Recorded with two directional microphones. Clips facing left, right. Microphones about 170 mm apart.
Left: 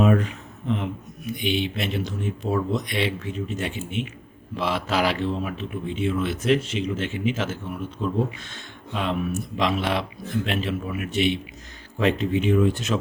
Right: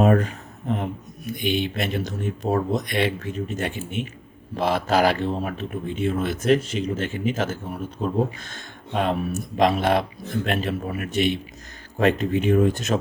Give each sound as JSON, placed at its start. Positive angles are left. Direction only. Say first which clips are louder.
{"t": 0.0, "sound": "a man's voice", "louder": "right 2 dB", "side_deg": -45}